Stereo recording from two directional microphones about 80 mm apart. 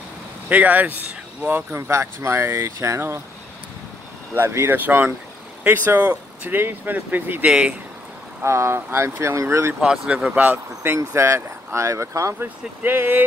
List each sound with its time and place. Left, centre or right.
0.5 s speech: right
1.8 s speech: right
4.4 s speech: right
4.7 s speech: right
8.5 s speech: right
9.8 s speech: centre; by 12.4 s right
12.4 s speech: right